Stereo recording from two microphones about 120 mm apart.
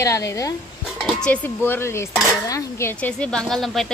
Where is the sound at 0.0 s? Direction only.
25° left (ahead or behind).